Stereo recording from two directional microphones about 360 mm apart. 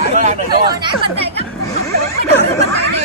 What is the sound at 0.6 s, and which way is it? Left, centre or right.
Speech, centre.